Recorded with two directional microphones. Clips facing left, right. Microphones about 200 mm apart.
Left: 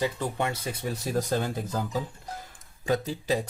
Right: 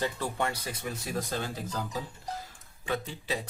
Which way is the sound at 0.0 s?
20° left (ahead or behind).